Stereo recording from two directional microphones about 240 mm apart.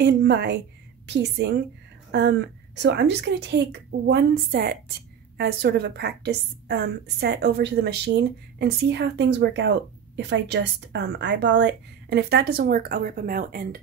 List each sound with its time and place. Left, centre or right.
0.0 s a woman's voice: right